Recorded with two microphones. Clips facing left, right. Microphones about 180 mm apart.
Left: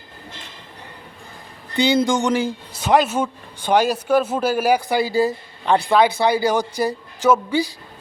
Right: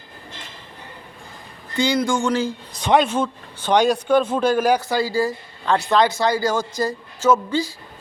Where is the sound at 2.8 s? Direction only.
5° left (ahead or behind).